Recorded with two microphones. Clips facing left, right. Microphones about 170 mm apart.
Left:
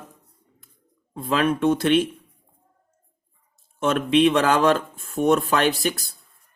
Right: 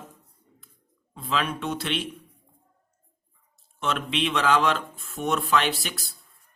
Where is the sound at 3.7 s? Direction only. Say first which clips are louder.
Left 9 dB; 45° left (ahead or behind).